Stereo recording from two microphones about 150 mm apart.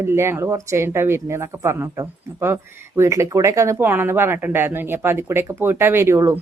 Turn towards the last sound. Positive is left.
turn(degrees=-20)  # may be behind; listen again after turning